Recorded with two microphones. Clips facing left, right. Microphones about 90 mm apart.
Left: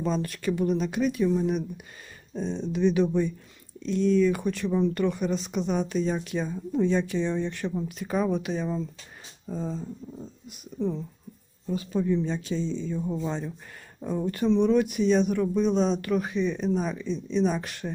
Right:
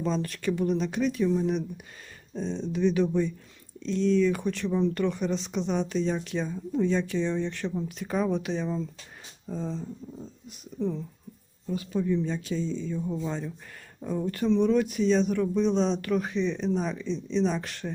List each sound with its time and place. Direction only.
0.0 s speech: 10° left (ahead or behind)
10.5 s speech: 20° left (ahead or behind)
11.7 s speech: 30° left (ahead or behind); by 17.9 s 10° left (ahead or behind)